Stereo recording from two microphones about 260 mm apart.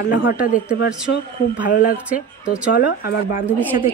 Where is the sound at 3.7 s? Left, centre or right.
Centre.